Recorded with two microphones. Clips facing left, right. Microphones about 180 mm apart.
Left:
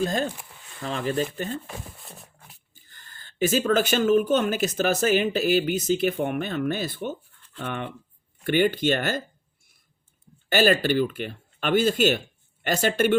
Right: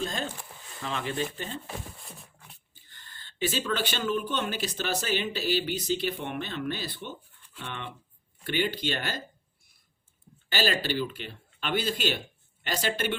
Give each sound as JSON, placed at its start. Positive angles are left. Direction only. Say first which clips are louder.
{"t": 0.0, "sound": "speech", "louder": "left 7 dB", "side_deg": 45}
{"t": 2.7, "sound": "speech", "louder": "left 1 dB", "side_deg": 45}
{"t": 10.5, "sound": "speech", "louder": "left 8 dB", "side_deg": 50}